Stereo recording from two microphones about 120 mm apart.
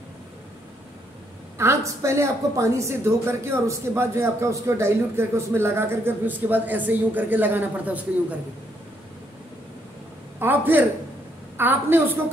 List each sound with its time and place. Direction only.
1.6 s a woman's voice: 25° right (ahead or behind)
10.4 s a man's voice: 15° right (ahead or behind)